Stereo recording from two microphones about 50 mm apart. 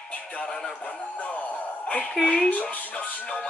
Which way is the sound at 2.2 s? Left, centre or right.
Left.